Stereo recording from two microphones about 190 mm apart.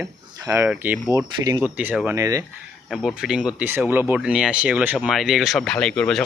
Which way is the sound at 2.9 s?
Centre (ahead or behind).